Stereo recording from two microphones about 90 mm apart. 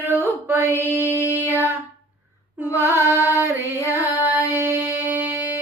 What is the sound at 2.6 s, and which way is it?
Mantra, 30° left (ahead or behind).